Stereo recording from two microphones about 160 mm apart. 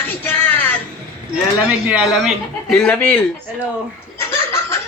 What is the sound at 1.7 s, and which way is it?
Speech, 10° right (ahead or behind).